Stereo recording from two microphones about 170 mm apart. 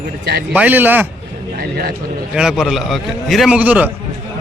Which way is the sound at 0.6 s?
10° right (ahead or behind).